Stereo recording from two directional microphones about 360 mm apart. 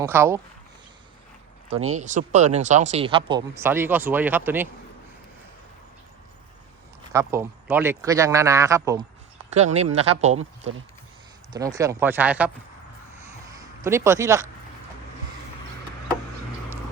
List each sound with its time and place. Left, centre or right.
0.0 s speech: centre
1.7 s speech: right
2.0 s speech: centre
7.1 s speech: centre
13.1 s a sound: centre